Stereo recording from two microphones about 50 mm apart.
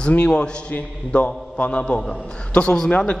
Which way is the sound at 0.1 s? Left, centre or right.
Left.